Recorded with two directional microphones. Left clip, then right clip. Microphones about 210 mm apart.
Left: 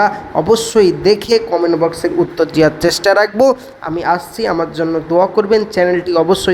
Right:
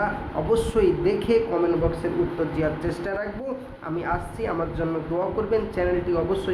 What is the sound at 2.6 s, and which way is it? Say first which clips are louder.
Speech: left 14 dB; 40° left (ahead or behind).